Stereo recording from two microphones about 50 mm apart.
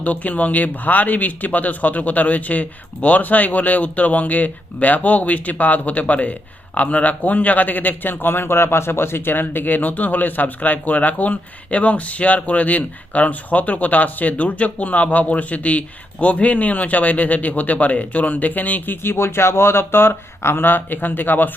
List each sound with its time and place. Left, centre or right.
0.0 s speech: left
19.0 s speech: left